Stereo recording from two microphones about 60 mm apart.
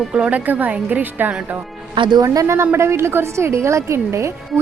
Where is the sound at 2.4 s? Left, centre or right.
Right.